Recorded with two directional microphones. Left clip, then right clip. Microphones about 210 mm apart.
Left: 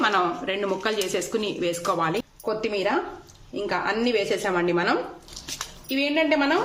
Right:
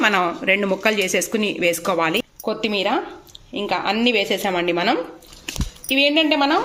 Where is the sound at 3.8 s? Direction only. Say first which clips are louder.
Right 5 dB; 20° right (ahead or behind).